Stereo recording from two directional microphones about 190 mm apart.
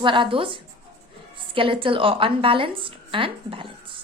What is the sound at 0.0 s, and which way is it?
A woman's voice, 25° right (ahead or behind).